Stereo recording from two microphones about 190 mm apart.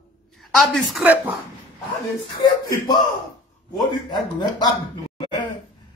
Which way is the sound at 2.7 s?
20° left (ahead or behind).